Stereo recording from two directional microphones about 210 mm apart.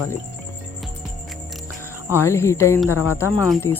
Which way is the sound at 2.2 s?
10° left (ahead or behind).